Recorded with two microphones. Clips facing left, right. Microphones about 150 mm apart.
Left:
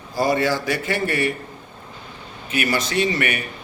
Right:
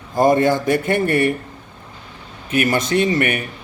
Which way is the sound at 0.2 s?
50° right (ahead or behind).